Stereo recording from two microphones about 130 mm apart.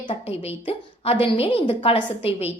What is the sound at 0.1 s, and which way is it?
A woman's voice, 45° left (ahead or behind).